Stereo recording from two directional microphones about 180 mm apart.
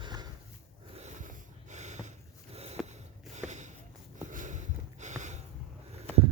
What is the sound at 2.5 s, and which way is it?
Sniff, 35° right (ahead or behind).